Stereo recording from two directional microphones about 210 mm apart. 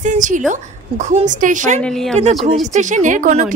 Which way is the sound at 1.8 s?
Centre (ahead or behind).